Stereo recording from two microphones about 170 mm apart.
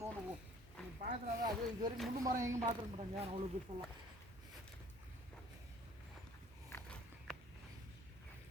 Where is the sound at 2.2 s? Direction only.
15° right (ahead or behind).